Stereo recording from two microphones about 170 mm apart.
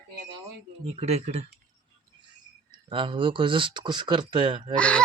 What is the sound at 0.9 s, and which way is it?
Speech, 40° right (ahead or behind).